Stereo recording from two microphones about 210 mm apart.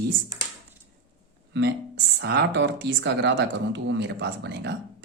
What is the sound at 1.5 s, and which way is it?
Speech, 55° right (ahead or behind).